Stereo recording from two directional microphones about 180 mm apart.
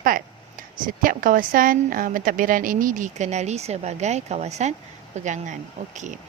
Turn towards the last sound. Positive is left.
turn(degrees=-40)  # may be behind; listen again after turning